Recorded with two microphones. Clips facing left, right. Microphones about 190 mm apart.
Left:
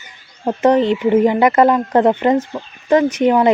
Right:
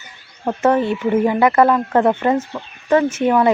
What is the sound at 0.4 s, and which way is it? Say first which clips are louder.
Speech: left 3 dB; 20° left (ahead or behind).